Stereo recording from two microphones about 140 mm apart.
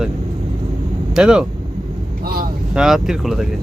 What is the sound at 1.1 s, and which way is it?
Speech, 5° right (ahead or behind).